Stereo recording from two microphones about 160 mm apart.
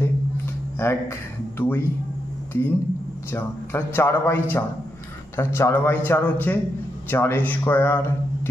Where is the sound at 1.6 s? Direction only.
15° left (ahead or behind).